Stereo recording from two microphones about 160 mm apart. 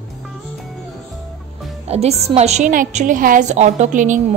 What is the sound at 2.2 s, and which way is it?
A woman's voice, 40° right (ahead or behind).